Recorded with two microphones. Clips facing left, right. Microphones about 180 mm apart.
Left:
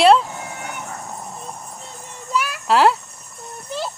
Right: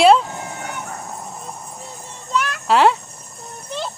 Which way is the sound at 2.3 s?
10° left (ahead or behind).